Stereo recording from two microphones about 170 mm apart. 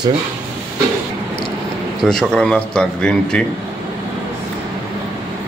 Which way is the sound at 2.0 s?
5° left (ahead or behind).